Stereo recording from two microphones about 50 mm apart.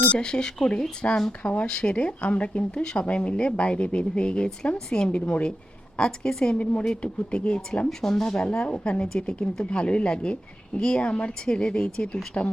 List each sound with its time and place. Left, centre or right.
0.2 s speech: centre
1.4 s speech: left
1.6 s speech: centre